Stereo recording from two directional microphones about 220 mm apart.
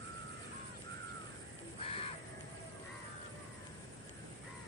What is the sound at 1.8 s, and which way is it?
Crow, 25° left (ahead or behind).